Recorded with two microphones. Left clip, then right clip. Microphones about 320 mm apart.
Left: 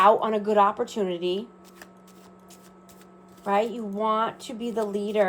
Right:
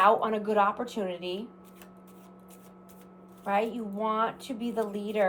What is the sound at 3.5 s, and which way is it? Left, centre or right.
A woman's voice, left.